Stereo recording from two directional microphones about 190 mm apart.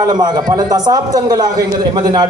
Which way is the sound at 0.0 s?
20° right (ahead or behind).